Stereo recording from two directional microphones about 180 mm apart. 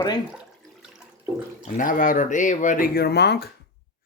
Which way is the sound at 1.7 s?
45° left (ahead or behind).